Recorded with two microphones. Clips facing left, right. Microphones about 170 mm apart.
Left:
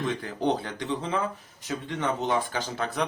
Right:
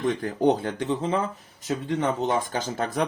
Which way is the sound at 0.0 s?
45° right (ahead or behind).